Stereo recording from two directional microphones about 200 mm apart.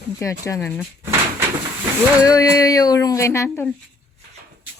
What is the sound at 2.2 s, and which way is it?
Speech, 20° left (ahead or behind).